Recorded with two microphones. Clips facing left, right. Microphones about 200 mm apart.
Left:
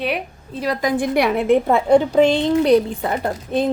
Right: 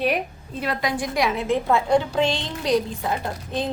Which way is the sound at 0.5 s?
35° left (ahead or behind).